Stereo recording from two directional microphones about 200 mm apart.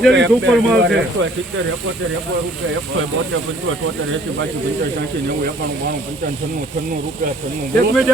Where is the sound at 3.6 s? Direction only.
75° right (ahead or behind).